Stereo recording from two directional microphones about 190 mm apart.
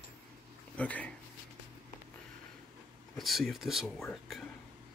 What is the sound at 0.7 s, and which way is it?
Speech, 5° left (ahead or behind).